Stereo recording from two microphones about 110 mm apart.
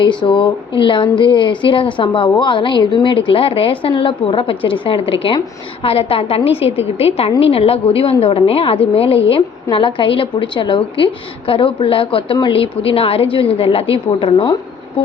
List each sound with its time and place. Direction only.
0.0 s a woman's voice: 45° left (ahead or behind)